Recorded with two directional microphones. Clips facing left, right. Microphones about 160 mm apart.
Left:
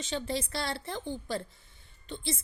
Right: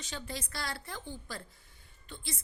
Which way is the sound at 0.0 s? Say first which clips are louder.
Left 8 dB; 25° left (ahead or behind).